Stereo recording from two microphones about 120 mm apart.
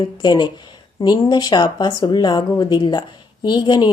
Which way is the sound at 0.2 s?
40° left (ahead or behind).